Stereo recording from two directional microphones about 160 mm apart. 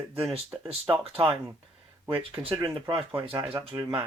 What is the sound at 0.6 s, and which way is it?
Speech, 30° right (ahead or behind).